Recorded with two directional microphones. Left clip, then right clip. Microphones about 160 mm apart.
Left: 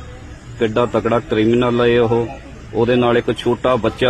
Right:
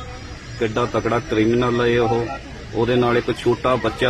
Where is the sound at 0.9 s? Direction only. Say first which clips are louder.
Left 3 dB; 20° left (ahead or behind).